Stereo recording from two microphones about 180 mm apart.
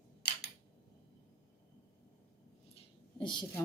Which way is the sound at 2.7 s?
25° left (ahead or behind).